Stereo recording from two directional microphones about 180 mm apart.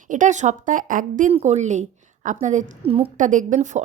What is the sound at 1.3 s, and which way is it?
A woman's voice, 40° right (ahead or behind).